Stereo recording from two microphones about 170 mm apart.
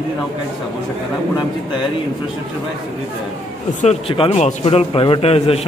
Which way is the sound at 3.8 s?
35° left (ahead or behind).